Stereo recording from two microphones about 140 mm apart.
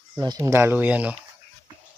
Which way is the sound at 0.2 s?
25° right (ahead or behind).